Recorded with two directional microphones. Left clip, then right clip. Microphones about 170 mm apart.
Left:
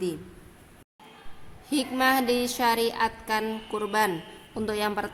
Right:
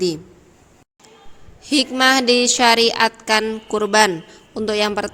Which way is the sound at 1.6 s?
35° right (ahead or behind).